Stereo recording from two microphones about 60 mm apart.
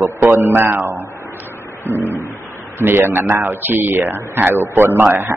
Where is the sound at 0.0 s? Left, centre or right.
Right.